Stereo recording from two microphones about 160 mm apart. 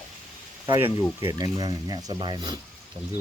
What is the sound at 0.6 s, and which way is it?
Speech, 15° right (ahead or behind).